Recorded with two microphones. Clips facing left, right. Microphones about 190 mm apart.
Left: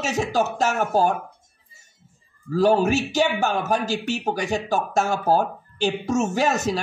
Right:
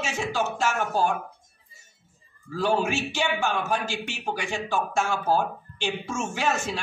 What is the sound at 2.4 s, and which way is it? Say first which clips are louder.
A man's voice: left 6 dB; 40° left (ahead or behind).